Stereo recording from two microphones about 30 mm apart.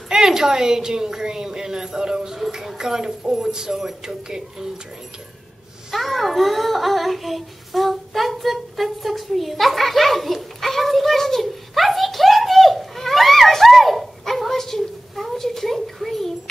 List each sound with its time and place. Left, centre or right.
0.1 s a woman's voice: right
5.9 s child singing: centre
15.3 s a sound: centre